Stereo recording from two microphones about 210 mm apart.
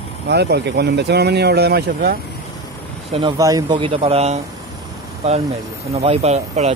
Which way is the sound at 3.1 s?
25° right (ahead or behind).